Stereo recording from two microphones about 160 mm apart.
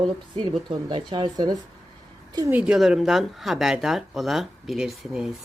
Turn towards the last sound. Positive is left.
turn(degrees=0)  # may be behind; listen again after turning